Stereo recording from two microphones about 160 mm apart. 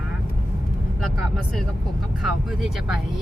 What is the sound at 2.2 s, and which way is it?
Speech, 5° right (ahead or behind).